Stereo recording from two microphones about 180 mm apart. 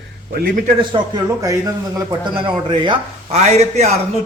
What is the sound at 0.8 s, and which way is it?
A man's voice, 25° right (ahead or behind).